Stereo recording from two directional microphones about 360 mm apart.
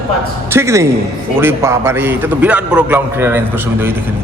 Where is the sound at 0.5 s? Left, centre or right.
Centre.